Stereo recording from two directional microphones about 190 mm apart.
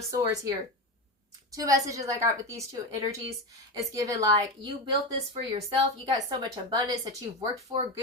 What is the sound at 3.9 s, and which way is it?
A woman's voice, 15° right (ahead or behind).